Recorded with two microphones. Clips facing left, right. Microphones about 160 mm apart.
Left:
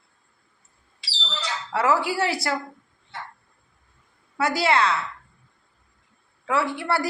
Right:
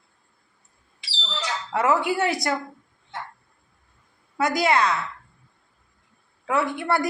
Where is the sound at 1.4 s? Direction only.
20° right (ahead or behind).